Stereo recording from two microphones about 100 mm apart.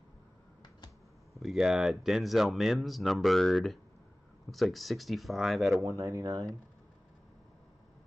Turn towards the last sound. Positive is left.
turn(degrees=-35)  # may be behind; listen again after turning